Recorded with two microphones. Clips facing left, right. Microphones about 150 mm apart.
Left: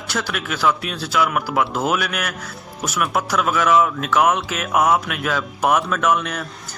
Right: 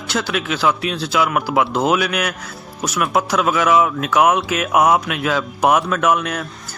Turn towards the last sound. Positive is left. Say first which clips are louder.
# right 2 dB
turn(degrees=-10)  # may be behind; listen again after turning